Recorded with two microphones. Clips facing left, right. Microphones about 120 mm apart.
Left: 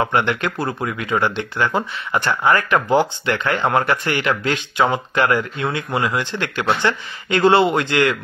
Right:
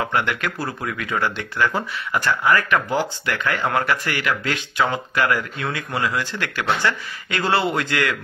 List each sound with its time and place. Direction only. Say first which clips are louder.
0.0 s speech: left 4 dB; 25° left (ahead or behind)